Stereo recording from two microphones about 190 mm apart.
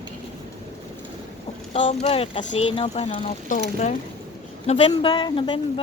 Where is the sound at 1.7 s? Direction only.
40° left (ahead or behind).